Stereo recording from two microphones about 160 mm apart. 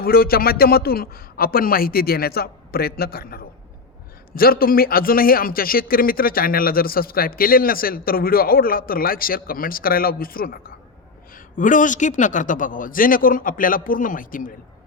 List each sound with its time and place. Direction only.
0.0 s a man's voice: 70° left (ahead or behind)